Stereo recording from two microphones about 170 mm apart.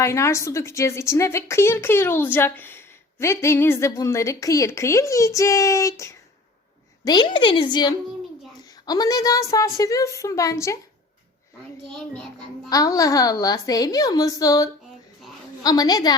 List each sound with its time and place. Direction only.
0.0 s a woman's voice: 15° left (ahead or behind)
11.9 s a child's voice: 5° left (ahead or behind)
12.7 s a woman's voice: 20° left (ahead or behind)